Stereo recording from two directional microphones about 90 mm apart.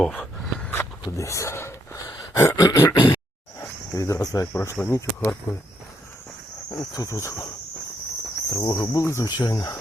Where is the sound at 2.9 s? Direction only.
55° left (ahead or behind).